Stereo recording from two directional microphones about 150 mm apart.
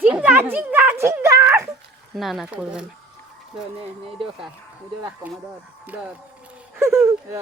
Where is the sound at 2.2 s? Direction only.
Centre (ahead or behind).